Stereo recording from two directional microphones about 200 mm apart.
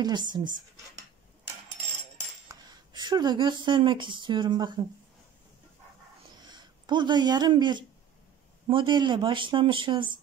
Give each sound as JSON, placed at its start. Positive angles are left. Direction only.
{"t": 0.0, "sound": "speech", "side_deg": -20}
{"t": 2.4, "sound": "speech", "side_deg": -20}
{"t": 6.5, "sound": "speech", "side_deg": -20}